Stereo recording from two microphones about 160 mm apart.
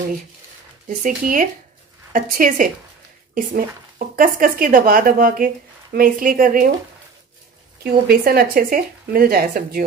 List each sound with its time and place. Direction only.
0.8 s speech: 55° right (ahead or behind)
4.2 s speech: 60° right (ahead or behind)
7.8 s speech: 65° right (ahead or behind)